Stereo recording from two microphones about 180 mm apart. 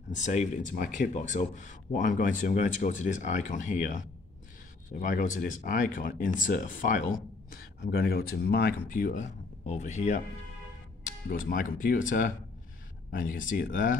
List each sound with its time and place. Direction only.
0.1 s speech: 40° left (ahead or behind)
7.8 s speech: 60° left (ahead or behind); by 10.2 s 40° left (ahead or behind)
11.3 s speech: 50° left (ahead or behind)